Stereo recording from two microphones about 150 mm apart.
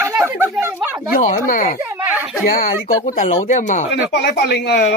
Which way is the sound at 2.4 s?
65° left (ahead or behind).